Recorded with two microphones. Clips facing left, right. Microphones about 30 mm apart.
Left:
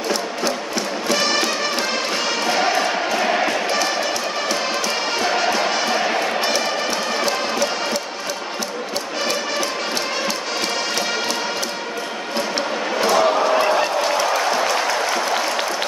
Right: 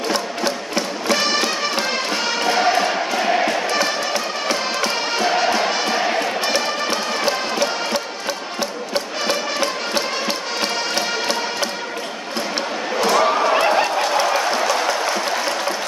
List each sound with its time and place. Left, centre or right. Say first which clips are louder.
0.1 s music: even; centre
1.1 s music: even; centre
5.1 s music: right 1 dB; centre
7.2 s music: right 3 dB; centre
9.6 s music: right 1 dB; right
12.5 s a sound: right 1 dB; centre
13.6 s fowl: right 1 dB; centre
14.2 s applause: even; centre